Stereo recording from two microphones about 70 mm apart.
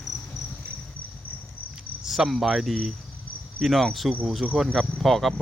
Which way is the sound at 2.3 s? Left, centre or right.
Centre.